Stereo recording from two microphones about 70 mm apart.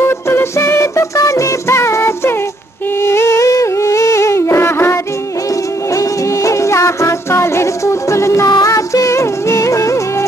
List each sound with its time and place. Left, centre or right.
0.0 s music: left
3.0 s humming: left
5.9 s music: left
8.5 s music: left